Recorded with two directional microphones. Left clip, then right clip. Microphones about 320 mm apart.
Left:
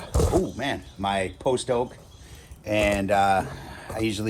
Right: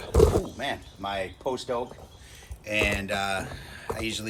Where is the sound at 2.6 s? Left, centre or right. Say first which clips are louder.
Left 3 dB; centre.